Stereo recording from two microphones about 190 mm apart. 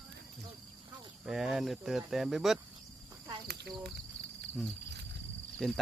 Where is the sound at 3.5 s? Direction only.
60° right (ahead or behind).